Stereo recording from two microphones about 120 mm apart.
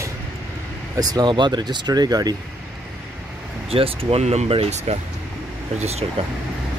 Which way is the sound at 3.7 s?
50° right (ahead or behind).